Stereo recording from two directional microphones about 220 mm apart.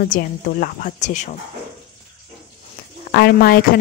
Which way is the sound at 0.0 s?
40° left (ahead or behind).